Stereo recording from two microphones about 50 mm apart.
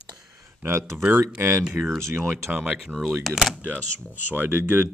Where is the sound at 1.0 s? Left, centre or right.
Right.